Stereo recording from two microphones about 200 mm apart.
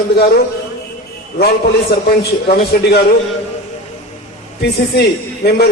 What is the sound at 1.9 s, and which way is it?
Speech, 55° left (ahead or behind).